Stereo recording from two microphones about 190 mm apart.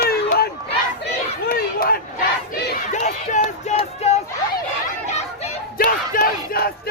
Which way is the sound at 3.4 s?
30° left (ahead or behind).